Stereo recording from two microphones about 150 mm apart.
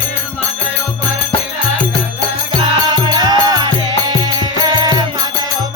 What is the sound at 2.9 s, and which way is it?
Music, 30° right (ahead or behind).